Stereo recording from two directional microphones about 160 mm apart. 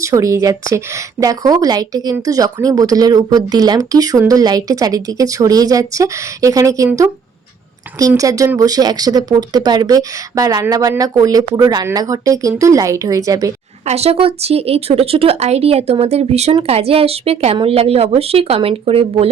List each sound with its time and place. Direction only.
0.0 s speech: 20° right (ahead or behind)
13.8 s a woman's voice: 40° right (ahead or behind)